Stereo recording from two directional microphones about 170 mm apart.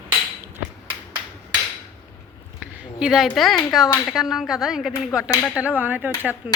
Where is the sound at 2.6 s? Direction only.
5° right (ahead or behind).